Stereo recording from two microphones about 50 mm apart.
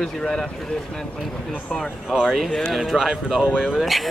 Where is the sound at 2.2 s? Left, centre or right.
Centre.